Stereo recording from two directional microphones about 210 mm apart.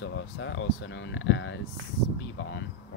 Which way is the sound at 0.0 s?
60° left (ahead or behind).